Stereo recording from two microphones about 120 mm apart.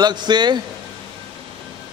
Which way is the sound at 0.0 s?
40° right (ahead or behind).